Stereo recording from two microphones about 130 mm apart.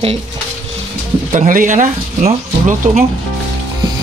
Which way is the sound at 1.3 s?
85° right.